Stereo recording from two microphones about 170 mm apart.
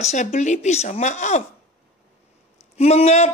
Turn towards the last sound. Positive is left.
turn(degrees=40)  # may be behind; listen again after turning